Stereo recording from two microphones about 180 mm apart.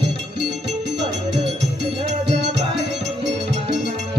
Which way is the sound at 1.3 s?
30° right (ahead or behind).